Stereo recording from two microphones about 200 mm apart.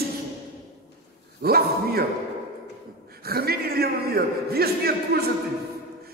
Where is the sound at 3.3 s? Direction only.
50° right (ahead or behind).